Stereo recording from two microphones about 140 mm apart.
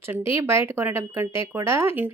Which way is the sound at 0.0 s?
15° right (ahead or behind).